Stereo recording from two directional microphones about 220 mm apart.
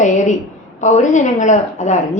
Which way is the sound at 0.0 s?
35° left (ahead or behind).